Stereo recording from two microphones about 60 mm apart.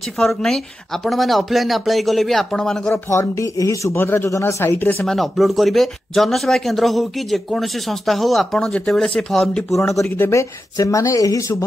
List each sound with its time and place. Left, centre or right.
0.2 s speech: centre
3.1 s speech: left
3.9 s a man's voice: left
4.3 s speech: left
5.0 s speech: centre
9.8 s speech: left